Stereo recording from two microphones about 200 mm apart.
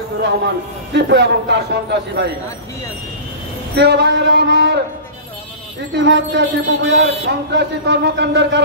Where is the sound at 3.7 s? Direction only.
60° right (ahead or behind).